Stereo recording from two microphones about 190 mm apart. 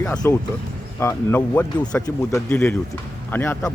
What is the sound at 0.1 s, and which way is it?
Speech, 5° left (ahead or behind).